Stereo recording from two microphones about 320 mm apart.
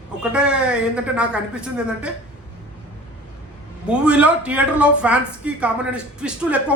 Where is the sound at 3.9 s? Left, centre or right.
Centre.